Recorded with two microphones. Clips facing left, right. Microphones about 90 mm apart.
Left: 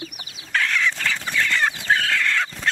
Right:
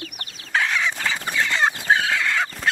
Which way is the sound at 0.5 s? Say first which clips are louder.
Even; 15° right (ahead or behind).